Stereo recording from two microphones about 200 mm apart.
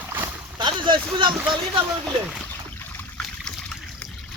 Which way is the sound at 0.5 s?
25° right (ahead or behind).